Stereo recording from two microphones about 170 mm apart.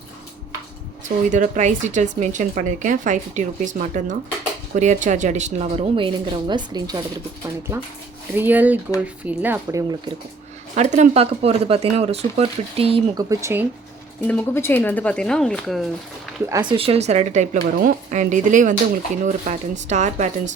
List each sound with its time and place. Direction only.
1.0 s speech: 50° right (ahead or behind); by 9.8 s 10° right (ahead or behind)
10.8 s speech: 45° right (ahead or behind)
13.1 s speech: 20° right (ahead or behind)
14.3 s speech: 10° left (ahead or behind)
16.5 s speech: 25° right (ahead or behind); by 20.5 s 45° right (ahead or behind)